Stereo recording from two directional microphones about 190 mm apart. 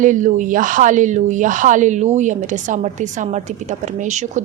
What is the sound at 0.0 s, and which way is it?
Speech, 40° right (ahead or behind).